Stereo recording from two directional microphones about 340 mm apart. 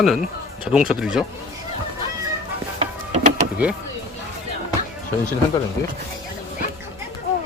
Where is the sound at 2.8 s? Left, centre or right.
Right.